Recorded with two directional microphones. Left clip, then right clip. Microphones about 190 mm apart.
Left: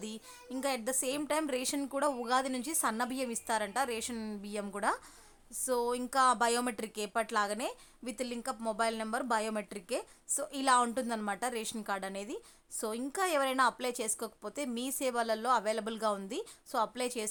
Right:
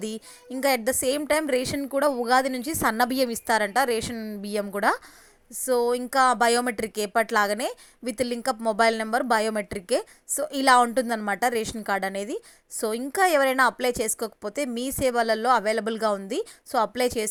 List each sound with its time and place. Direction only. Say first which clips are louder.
0.6 s speech: right 11 dB; 25° right (ahead or behind)
4.1 s speech: right 7 dB; 15° right (ahead or behind)
4.4 s speech: right 10 dB; 30° right (ahead or behind)